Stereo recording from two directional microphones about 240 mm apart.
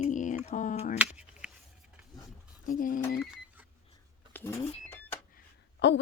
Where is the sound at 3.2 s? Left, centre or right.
Centre.